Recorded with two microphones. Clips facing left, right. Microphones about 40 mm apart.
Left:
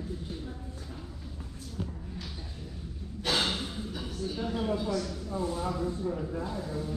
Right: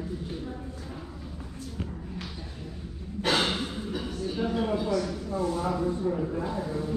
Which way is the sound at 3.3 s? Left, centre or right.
Centre.